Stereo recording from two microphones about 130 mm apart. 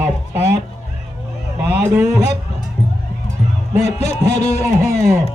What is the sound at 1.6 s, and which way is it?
Speech, 20° right (ahead or behind).